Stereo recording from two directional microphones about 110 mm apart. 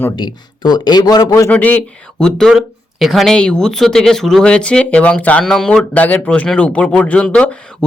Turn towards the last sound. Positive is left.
turn(degrees=10)  # may be behind; listen again after turning